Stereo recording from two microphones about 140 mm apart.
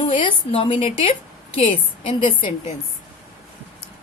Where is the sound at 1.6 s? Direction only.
50° left (ahead or behind).